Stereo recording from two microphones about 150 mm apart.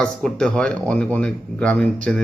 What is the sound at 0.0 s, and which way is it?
Speech, 5° left (ahead or behind).